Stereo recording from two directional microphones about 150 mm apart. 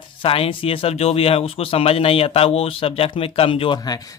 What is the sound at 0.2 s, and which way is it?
Speech, 35° left (ahead or behind).